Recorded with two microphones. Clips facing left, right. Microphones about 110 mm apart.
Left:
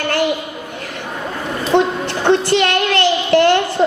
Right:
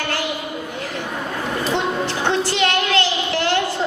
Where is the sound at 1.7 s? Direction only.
60° left (ahead or behind).